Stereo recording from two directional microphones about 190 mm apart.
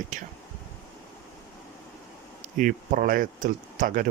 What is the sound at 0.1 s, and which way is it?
Speech, 40° right (ahead or behind).